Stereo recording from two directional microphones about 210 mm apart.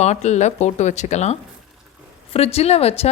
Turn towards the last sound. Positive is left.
turn(degrees=30)  # may be behind; listen again after turning